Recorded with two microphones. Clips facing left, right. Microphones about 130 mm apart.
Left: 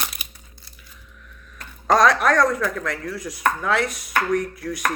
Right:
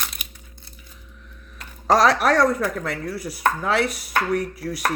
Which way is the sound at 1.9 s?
30° right (ahead or behind).